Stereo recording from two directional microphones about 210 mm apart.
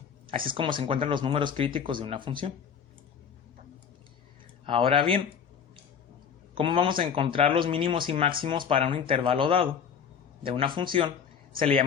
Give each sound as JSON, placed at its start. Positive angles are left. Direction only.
{"t": 0.3, "sound": "speech", "side_deg": -25}
{"t": 4.6, "sound": "speech", "side_deg": -25}
{"t": 6.5, "sound": "speech", "side_deg": -25}